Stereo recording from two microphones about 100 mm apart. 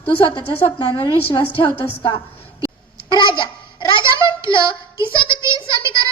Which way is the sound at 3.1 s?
50° left (ahead or behind).